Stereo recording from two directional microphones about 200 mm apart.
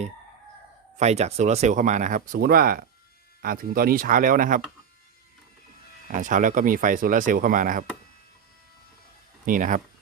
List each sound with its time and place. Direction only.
0.9 s speech: 35° right (ahead or behind)
6.1 s speech: 40° right (ahead or behind)
9.5 s speech: 40° right (ahead or behind)